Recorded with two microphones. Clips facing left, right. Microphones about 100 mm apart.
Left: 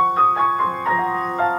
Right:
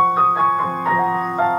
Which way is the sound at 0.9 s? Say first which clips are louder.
Right 2 dB; 10° right (ahead or behind).